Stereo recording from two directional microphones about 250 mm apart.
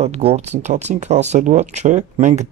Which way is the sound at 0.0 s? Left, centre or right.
Right.